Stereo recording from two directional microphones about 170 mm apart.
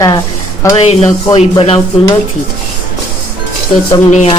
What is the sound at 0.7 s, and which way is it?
Speech, 35° left (ahead or behind).